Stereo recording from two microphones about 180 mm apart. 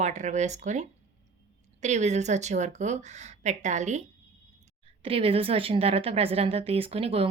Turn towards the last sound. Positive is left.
turn(degrees=-30)  # may be behind; listen again after turning